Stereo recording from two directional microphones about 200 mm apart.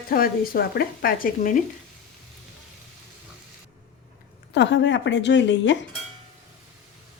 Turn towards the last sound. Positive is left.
turn(degrees=70)  # may be behind; listen again after turning